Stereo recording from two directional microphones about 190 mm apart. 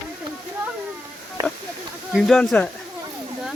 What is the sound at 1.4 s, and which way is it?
Speech, 15° right (ahead or behind).